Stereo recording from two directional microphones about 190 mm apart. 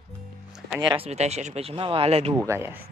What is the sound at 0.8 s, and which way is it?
Speech, 30° right (ahead or behind).